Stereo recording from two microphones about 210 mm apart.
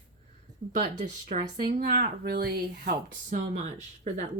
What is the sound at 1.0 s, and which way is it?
Speech, 40° right (ahead or behind).